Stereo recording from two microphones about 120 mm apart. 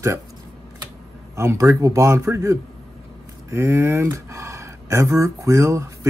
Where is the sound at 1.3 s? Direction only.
25° right (ahead or behind).